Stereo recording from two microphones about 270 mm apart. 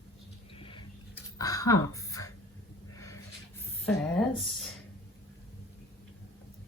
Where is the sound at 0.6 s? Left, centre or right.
Centre.